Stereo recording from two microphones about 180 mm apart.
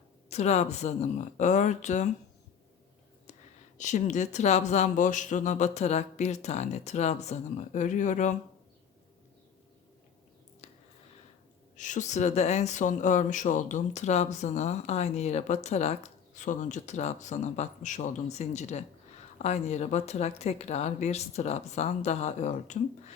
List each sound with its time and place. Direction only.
0.3 s speech: 40° left (ahead or behind)
3.8 s speech: 40° left (ahead or behind)
11.8 s speech: 45° left (ahead or behind)